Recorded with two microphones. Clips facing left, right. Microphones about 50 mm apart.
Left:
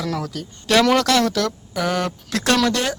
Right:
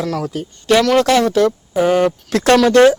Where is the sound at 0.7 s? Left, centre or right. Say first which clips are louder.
Right 4 dB; centre.